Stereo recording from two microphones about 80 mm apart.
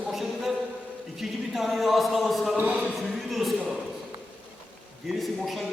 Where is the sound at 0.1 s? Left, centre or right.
Centre.